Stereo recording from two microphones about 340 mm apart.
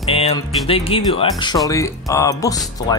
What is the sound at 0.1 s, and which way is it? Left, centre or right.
Speech, centre.